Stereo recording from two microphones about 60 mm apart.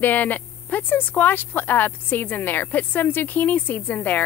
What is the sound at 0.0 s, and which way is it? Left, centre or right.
Speech, left.